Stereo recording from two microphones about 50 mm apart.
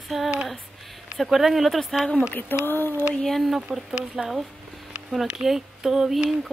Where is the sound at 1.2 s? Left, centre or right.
Centre.